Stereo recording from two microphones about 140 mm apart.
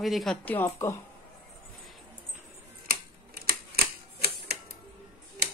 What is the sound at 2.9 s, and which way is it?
Typewriter, 90° right.